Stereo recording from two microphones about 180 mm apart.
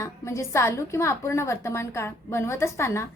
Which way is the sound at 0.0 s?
15° left (ahead or behind).